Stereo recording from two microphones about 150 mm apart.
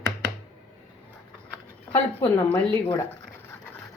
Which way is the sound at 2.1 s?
15° left (ahead or behind).